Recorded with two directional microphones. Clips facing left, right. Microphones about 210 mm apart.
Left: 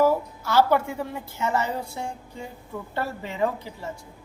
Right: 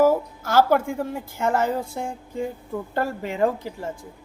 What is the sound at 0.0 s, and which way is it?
A woman's voice, 45° right (ahead or behind).